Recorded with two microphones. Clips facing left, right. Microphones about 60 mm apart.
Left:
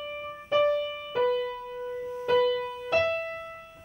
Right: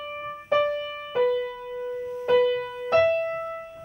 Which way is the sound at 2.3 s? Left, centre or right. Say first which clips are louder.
Right 3 dB; right.